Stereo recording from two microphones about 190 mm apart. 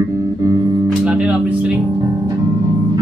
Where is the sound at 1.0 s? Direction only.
5° right (ahead or behind).